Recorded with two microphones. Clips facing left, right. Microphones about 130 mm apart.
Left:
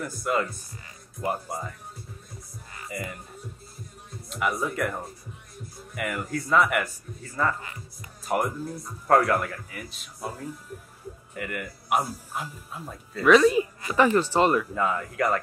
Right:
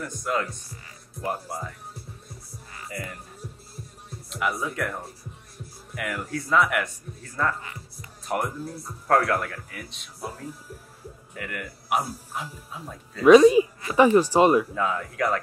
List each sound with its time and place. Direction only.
0.0 s speech: 5° left (ahead or behind)
2.9 s speech: centre (ahead or behind)
4.3 s speech: centre (ahead or behind)
13.2 s speech: 25° right (ahead or behind)
14.7 s speech: centre (ahead or behind)